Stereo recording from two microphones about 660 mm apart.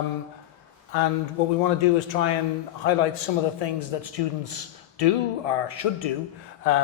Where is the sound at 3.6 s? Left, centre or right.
Left.